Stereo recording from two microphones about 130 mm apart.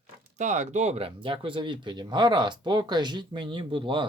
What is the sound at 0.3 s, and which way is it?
Speech, 65° right (ahead or behind).